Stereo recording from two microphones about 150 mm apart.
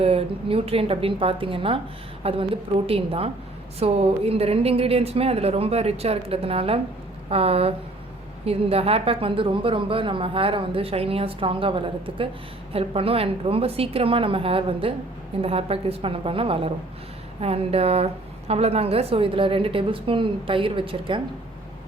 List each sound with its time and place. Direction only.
0.0 s a woman's voice: 40° right (ahead or behind)